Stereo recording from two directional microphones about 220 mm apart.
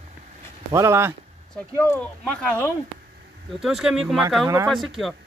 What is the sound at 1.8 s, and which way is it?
Speech, 5° left (ahead or behind).